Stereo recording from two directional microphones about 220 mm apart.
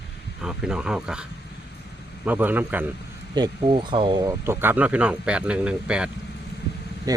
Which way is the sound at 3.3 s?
20° right (ahead or behind).